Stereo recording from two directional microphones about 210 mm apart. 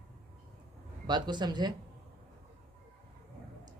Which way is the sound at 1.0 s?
20° right (ahead or behind).